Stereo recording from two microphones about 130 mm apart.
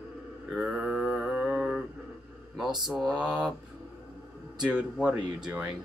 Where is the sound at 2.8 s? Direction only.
5° right (ahead or behind).